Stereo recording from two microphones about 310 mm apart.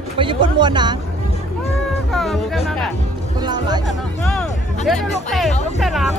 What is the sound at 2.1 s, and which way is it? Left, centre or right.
Speech, centre.